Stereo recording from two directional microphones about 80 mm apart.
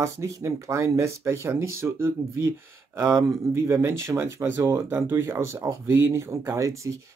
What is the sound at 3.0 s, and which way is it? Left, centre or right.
Speech, right.